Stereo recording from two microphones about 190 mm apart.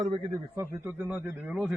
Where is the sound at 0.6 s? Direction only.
10° right (ahead or behind).